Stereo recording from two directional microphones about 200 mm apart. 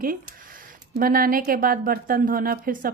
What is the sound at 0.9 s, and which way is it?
Speech, 45° right (ahead or behind).